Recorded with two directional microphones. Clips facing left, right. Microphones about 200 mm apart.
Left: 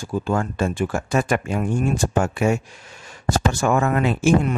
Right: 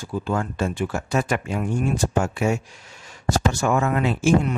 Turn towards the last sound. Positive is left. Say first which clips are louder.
# left 1 dB
turn(degrees=50)  # may be behind; listen again after turning